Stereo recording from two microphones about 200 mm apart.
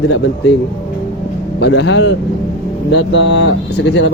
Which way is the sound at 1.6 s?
55° left (ahead or behind).